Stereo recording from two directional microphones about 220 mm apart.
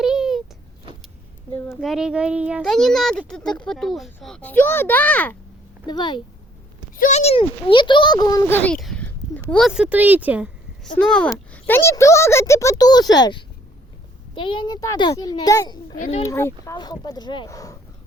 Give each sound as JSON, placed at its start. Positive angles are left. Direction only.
{"t": 0.0, "sound": "a sound", "side_deg": 0}
{"t": 1.5, "sound": "a sound", "side_deg": 10}
{"t": 1.8, "sound": "speech", "side_deg": 0}
{"t": 5.8, "sound": "a child's voice", "side_deg": 20}
{"t": 11.1, "sound": "a child's voice", "side_deg": 5}
{"t": 16.0, "sound": "a child's voice", "side_deg": 30}
{"t": 16.2, "sound": "a child's voice", "side_deg": 10}